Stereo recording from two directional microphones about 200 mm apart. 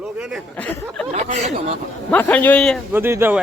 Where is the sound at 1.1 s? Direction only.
35° right (ahead or behind).